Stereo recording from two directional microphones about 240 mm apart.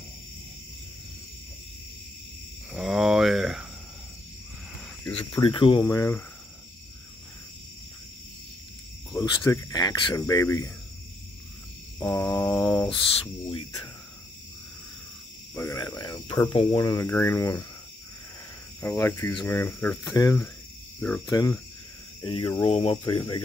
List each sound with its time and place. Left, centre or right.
2.7 s a sound: centre
5.2 s speech: centre
9.2 s speech: centre
12.0 s speech: centre
12.4 s a sound: centre
13.2 s speech: centre
15.5 s speech: centre
18.8 s speech: centre